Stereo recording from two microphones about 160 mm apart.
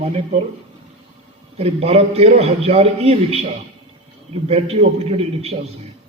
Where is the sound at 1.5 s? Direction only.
40° right (ahead or behind).